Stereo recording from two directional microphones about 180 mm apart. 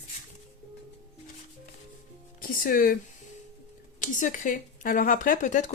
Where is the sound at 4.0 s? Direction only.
45° left (ahead or behind).